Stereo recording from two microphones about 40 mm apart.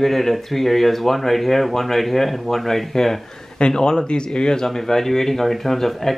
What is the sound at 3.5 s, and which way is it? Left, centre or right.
Speech, left.